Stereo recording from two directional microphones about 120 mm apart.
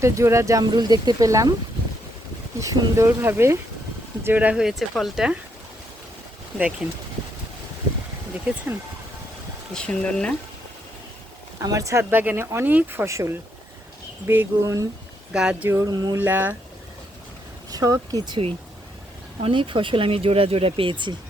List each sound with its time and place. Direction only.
0.0 s speech: 25° right (ahead or behind)
2.6 s speech: 25° right (ahead or behind); by 5.4 s 5° right (ahead or behind)
9.7 s speech: 10° left (ahead or behind)
11.6 s speech: 30° right (ahead or behind)
15.3 s speech: 5° right (ahead or behind)
15.7 s speech: 30° right (ahead or behind)
16.1 s speech: 15° right (ahead or behind)
17.7 s speech: 30° right (ahead or behind)
18.3 s speech: 50° right (ahead or behind)